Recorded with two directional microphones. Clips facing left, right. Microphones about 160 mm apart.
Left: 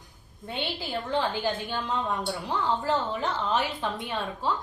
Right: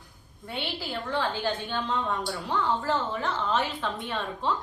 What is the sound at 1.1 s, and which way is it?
A woman's voice, 20° left (ahead or behind).